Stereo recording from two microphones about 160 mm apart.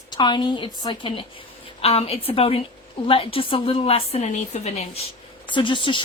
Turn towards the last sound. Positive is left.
turn(degrees=30)  # may be behind; listen again after turning